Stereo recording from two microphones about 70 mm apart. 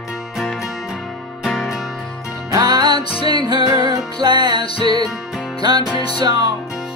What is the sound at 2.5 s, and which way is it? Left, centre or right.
Music, right.